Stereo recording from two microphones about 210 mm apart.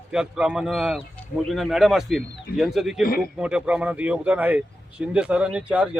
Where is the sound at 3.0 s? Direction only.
45° left (ahead or behind).